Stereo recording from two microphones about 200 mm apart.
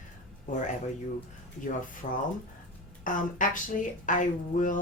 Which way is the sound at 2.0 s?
45° left (ahead or behind).